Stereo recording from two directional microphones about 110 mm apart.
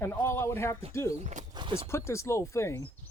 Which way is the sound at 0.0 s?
20° left (ahead or behind).